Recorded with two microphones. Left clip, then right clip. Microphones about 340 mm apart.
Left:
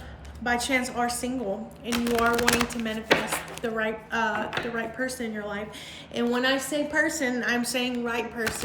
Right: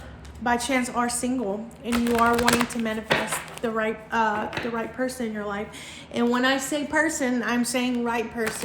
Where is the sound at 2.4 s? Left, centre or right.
Centre.